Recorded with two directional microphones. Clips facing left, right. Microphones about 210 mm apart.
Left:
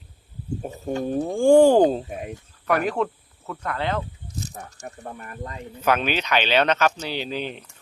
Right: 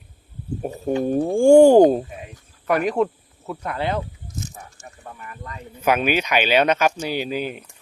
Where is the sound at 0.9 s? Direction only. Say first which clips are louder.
Right 4 dB; 10° right (ahead or behind).